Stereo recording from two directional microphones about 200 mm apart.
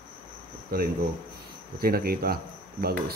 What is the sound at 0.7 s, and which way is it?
Speech, 50° right (ahead or behind).